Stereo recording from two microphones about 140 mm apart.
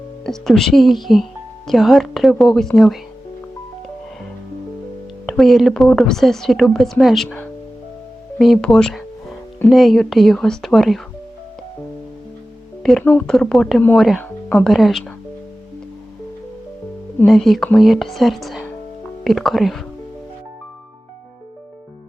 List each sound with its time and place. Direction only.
0.3 s a woman's voice: 5° left (ahead or behind)
5.2 s a woman's voice: centre (ahead or behind)
8.4 s a woman's voice: centre (ahead or behind)
12.8 s speech: centre (ahead or behind)
13.1 s speech: 15° left (ahead or behind)
13.3 s a woman's voice: centre (ahead or behind)
14.2 s music: 10° left (ahead or behind)
14.7 s a woman's voice: centre (ahead or behind)
17.2 s a woman's voice: centre (ahead or behind)